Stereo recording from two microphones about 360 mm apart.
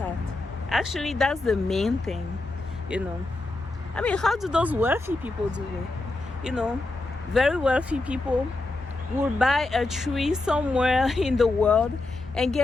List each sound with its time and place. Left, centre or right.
0.7 s speech: centre
3.9 s speech: centre
9.4 s speech: centre